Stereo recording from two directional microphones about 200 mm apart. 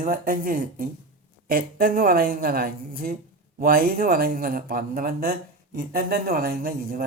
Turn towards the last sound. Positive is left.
turn(degrees=-50)  # may be behind; listen again after turning